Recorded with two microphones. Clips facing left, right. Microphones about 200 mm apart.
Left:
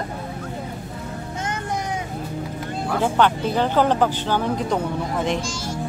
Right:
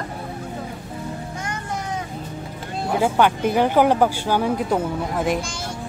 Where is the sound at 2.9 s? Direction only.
10° right (ahead or behind).